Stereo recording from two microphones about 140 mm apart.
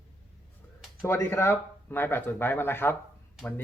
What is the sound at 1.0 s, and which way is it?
Speech, 15° left (ahead or behind).